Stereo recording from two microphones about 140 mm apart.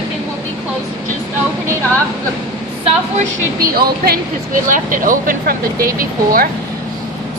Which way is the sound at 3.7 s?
80° right.